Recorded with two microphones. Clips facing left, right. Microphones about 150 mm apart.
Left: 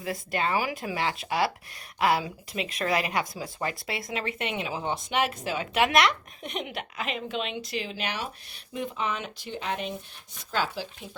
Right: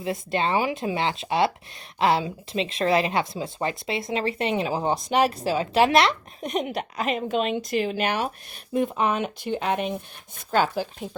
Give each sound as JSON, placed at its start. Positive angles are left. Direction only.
{"t": 0.0, "sound": "speech", "side_deg": -25}